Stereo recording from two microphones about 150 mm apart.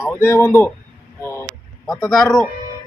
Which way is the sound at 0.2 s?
15° left (ahead or behind).